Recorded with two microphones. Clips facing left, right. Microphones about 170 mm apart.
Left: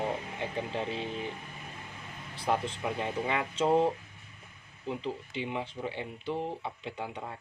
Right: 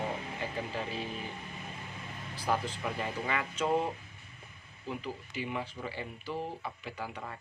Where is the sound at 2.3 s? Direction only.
25° left (ahead or behind).